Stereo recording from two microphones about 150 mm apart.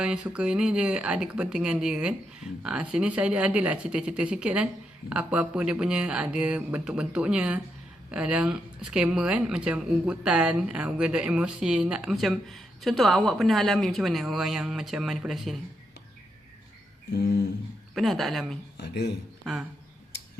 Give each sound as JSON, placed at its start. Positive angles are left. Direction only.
{"t": 0.0, "sound": "speech", "side_deg": -5}
{"t": 17.9, "sound": "speech", "side_deg": 0}
{"t": 18.8, "sound": "speech", "side_deg": 90}